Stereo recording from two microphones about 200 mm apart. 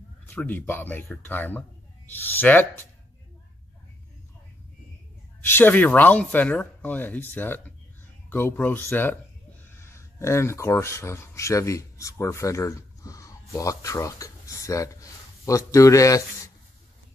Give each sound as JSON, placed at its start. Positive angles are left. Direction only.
{"t": 0.3, "sound": "speech", "side_deg": 5}
{"t": 5.4, "sound": "speech", "side_deg": 10}